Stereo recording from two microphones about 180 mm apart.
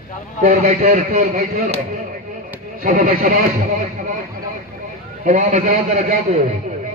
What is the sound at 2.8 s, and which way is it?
Speech, 55° right (ahead or behind).